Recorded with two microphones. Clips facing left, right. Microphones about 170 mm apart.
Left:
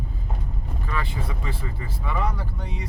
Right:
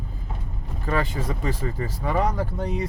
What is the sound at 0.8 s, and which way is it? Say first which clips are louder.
Speech: right 6 dB; 40° right (ahead or behind).